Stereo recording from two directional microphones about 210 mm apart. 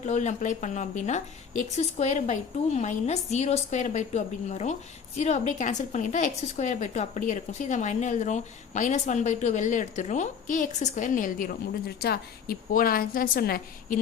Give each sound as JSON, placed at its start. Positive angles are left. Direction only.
{"t": 0.0, "sound": "a woman's voice", "side_deg": 35}